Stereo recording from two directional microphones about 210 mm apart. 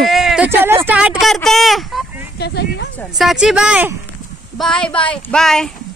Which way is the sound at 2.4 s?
50° left (ahead or behind).